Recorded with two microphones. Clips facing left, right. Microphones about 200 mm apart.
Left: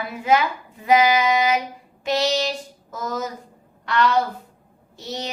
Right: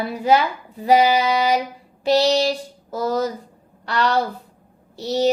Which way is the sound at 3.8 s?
35° right (ahead or behind).